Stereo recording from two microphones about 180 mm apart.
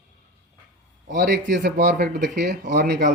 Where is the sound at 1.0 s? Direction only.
70° right (ahead or behind).